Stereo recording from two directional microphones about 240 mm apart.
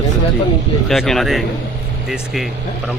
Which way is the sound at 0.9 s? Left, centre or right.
Centre.